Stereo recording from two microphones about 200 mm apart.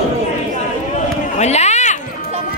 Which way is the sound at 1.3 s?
35° left (ahead or behind).